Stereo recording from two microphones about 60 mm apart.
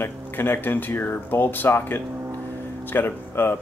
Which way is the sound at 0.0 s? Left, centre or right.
Left.